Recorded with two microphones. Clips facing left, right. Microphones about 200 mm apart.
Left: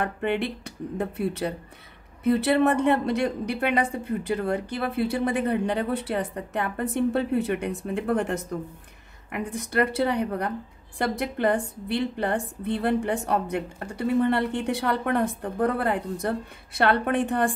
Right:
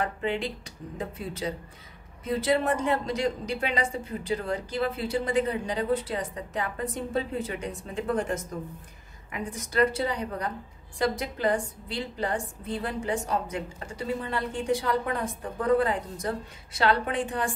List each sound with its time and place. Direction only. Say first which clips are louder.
0.0 s a woman's voice: left 3 dB; 60° left (ahead or behind)